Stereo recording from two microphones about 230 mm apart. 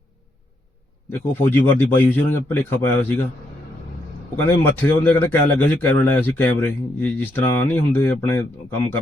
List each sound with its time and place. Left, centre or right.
1.1 s a man's voice: centre
4.4 s a man's voice: centre